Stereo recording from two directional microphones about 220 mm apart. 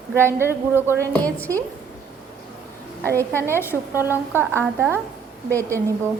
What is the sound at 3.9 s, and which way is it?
A woman's voice, 10° right (ahead or behind).